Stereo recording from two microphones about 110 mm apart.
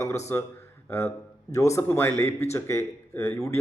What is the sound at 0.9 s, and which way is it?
A man's voice, 25° left (ahead or behind).